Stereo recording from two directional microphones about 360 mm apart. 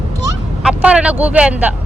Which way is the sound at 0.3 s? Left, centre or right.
Centre.